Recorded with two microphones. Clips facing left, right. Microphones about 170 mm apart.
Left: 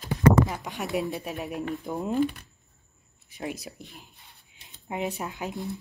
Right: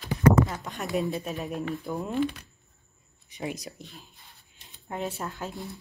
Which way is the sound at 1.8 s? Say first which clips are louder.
Left 2 dB; 20° left (ahead or behind).